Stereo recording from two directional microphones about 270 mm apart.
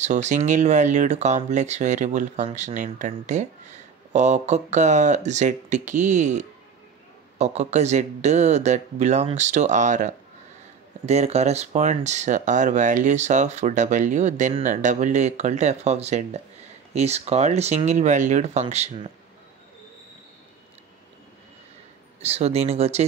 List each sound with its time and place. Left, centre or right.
0.0 s speech: right
22.2 s speech: right